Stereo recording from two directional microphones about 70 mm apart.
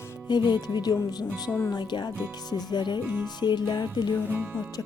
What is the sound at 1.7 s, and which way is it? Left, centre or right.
Speech, left.